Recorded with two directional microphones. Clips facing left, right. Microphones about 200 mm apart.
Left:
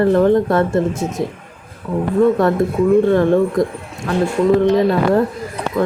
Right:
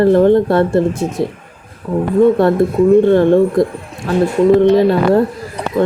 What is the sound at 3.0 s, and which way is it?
Speech, 30° right (ahead or behind).